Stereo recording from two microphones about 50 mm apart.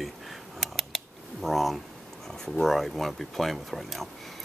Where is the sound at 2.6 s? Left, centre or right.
Centre.